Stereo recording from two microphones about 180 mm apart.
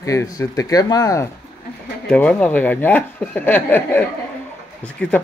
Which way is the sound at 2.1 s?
5° left (ahead or behind).